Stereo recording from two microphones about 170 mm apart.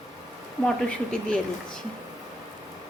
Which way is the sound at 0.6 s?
5° left (ahead or behind).